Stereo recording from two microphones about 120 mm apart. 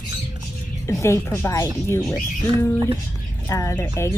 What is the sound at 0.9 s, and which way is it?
Speech, 25° left (ahead or behind).